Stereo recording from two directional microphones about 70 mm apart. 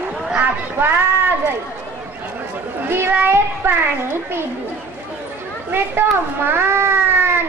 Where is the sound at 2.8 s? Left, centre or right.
Right.